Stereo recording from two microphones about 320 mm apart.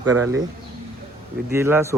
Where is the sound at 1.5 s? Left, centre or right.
Centre.